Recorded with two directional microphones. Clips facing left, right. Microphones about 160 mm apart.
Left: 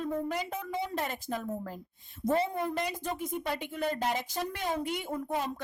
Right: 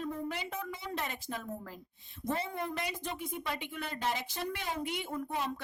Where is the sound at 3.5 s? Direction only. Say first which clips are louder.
Left 8 dB; 40° left (ahead or behind).